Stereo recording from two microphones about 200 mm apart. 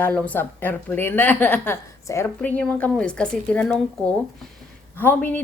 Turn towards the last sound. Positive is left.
turn(degrees=10)  # may be behind; listen again after turning